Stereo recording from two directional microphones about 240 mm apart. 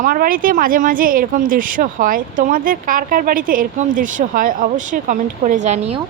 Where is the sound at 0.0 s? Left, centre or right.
Right.